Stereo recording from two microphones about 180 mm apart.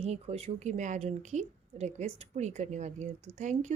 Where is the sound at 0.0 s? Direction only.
35° right (ahead or behind).